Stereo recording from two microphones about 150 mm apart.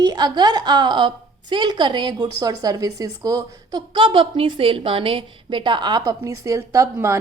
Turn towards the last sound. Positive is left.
turn(degrees=-20)  # may be behind; listen again after turning